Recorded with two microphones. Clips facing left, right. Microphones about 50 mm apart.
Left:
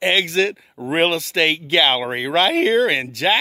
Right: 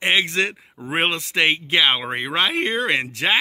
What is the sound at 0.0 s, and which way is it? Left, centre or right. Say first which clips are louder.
Speech: left 2 dB; centre.